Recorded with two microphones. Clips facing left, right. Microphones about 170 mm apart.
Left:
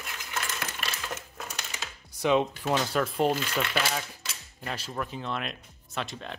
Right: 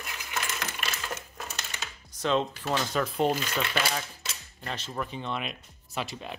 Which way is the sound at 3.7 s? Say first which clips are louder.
Even; 5° left (ahead or behind).